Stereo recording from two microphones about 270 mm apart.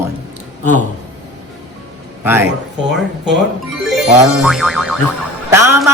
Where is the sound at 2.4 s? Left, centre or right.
Right.